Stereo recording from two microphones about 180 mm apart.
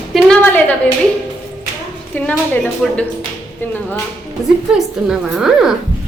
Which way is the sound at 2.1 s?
10° left (ahead or behind).